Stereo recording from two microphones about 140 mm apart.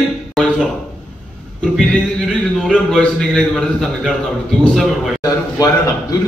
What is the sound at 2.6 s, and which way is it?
A man's voice, centre (ahead or behind).